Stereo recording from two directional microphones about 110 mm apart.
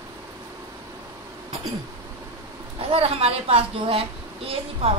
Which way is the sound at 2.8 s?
60° right (ahead or behind).